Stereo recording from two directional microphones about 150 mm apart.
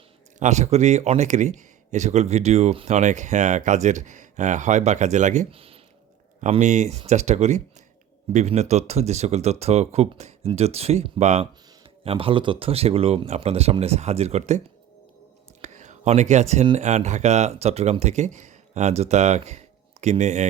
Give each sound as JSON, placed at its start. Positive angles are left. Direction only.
{"t": 0.3, "sound": "speech", "side_deg": -50}
{"t": 5.5, "sound": "speech", "side_deg": -40}
{"t": 6.5, "sound": "speech", "side_deg": -50}
{"t": 12.0, "sound": "speech", "side_deg": -35}
{"t": 15.6, "sound": "a sound", "side_deg": -50}
{"t": 16.7, "sound": "speech", "side_deg": -50}